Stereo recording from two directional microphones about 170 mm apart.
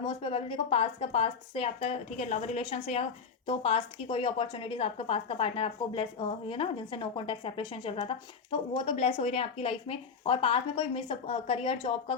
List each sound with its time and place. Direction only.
0.0 s a woman's voice: 30° left (ahead or behind)